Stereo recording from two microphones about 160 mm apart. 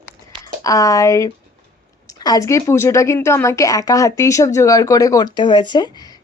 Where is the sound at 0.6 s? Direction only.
20° left (ahead or behind).